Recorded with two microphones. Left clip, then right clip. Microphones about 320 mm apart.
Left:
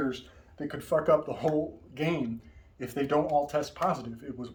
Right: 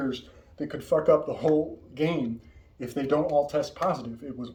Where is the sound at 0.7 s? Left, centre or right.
Centre.